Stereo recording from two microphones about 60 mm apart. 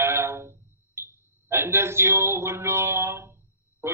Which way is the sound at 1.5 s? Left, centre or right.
Right.